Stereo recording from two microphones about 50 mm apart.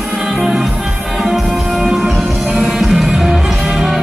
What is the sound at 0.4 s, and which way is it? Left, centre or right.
Music, centre.